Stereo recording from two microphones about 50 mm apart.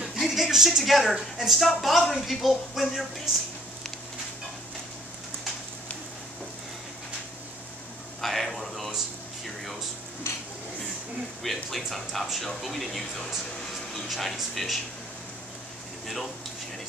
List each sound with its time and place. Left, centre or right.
0.2 s speech: centre
8.2 s a sound: centre
10.3 s stir: left
11.4 s speech: centre